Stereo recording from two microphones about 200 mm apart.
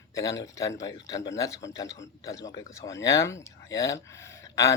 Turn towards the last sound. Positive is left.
turn(degrees=15)  # may be behind; listen again after turning